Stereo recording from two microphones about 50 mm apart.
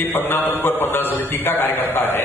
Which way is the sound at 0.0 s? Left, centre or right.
Left.